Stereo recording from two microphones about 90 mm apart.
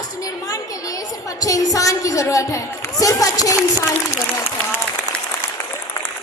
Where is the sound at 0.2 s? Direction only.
40° left (ahead or behind).